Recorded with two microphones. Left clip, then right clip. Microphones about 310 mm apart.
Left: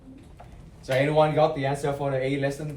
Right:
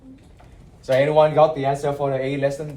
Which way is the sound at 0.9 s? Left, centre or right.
Centre.